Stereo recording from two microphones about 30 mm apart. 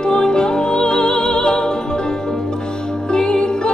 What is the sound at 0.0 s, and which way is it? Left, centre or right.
Music, left.